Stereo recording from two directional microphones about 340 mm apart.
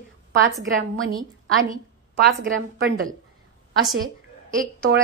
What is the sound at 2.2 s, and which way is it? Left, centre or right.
Speech, right.